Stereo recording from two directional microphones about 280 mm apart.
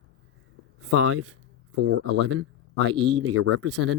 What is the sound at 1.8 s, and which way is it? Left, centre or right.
Speech, right.